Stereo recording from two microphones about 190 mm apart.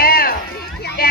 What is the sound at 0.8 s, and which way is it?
Run, 55° left (ahead or behind).